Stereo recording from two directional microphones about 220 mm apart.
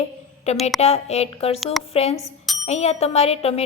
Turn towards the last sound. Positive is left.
turn(degrees=25)  # may be behind; listen again after turning